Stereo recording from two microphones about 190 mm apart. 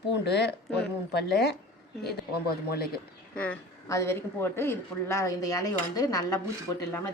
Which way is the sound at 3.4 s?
10° left (ahead or behind).